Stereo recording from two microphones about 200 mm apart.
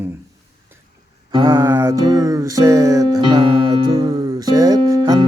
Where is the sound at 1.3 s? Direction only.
25° right (ahead or behind).